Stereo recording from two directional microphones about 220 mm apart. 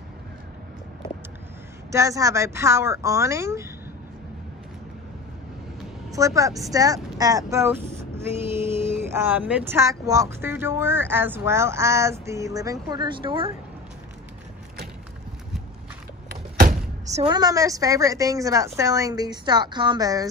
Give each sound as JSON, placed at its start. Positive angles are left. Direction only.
{"t": 1.9, "sound": "speech", "side_deg": -15}
{"t": 6.1, "sound": "speech", "side_deg": -15}
{"t": 16.3, "sound": "speech", "side_deg": -40}